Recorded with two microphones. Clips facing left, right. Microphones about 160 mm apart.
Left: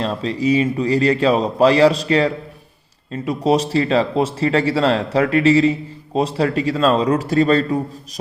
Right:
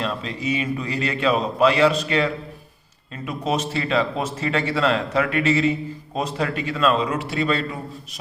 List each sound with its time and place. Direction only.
0.0 s speech: 35° left (ahead or behind)